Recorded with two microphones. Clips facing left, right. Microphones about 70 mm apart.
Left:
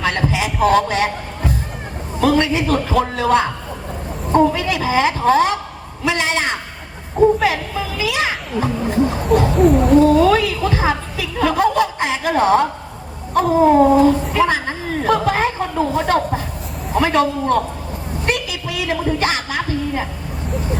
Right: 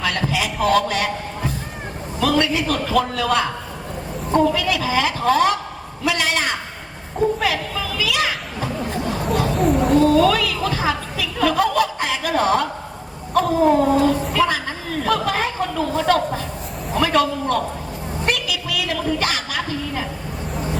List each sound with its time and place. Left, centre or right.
0.0 s heart sounds: left
0.7 s speech: left
2.2 s speech: left
9.6 s speech: centre
10.0 s speech: left
13.7 s a woman's voice: left
18.4 s a sound: left